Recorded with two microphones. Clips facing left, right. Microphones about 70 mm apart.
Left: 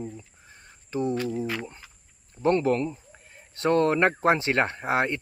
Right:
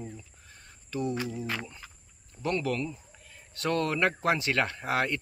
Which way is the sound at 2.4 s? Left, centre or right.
Left.